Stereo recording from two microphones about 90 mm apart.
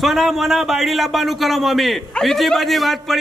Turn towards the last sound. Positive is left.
turn(degrees=0)  # may be behind; listen again after turning